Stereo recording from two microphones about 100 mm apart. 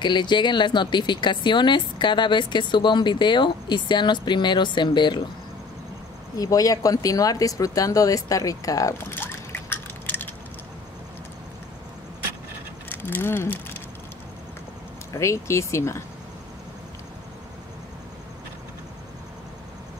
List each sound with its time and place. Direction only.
0.0 s speech: 50° left (ahead or behind)
6.3 s speech: 35° left (ahead or behind)
9.1 s drip: 20° left (ahead or behind)
12.9 s speech: 20° left (ahead or behind)
15.1 s speech: 30° left (ahead or behind)